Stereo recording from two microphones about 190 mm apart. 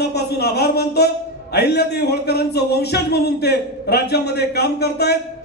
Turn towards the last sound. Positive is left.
turn(degrees=60)  # may be behind; listen again after turning